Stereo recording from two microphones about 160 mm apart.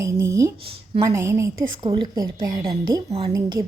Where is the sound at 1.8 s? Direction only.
30° right (ahead or behind).